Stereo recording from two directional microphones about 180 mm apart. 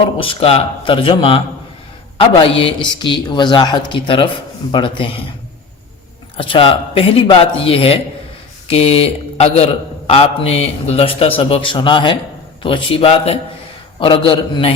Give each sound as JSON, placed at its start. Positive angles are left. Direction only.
{"t": 0.2, "sound": "a man's voice", "side_deg": 30}
{"t": 6.3, "sound": "a man's voice", "side_deg": 30}